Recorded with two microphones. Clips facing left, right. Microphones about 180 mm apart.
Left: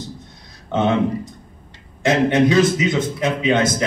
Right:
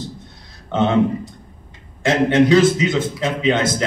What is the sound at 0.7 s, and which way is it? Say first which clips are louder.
A man's voice: right 1 dB; 20° left (ahead or behind).